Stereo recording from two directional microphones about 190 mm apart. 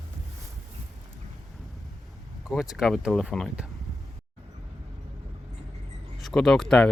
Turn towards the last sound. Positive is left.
turn(degrees=5)  # may be behind; listen again after turning